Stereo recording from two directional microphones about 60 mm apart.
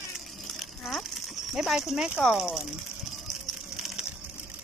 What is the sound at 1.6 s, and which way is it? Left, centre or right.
Speech, centre.